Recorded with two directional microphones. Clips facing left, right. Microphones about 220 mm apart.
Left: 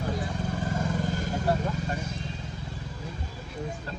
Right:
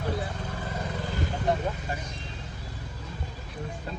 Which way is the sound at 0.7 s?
45° left (ahead or behind).